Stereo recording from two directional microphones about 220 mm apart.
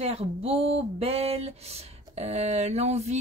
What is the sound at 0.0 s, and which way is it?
Speech, 25° right (ahead or behind).